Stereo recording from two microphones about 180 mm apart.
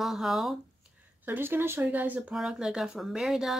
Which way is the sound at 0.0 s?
Centre (ahead or behind).